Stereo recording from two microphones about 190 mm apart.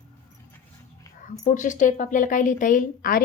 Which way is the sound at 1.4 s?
40° left (ahead or behind).